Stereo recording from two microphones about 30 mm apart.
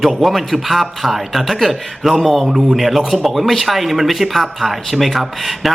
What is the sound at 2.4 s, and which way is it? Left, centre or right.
Speech, centre.